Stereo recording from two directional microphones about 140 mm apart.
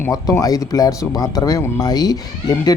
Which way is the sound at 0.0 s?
20° left (ahead or behind).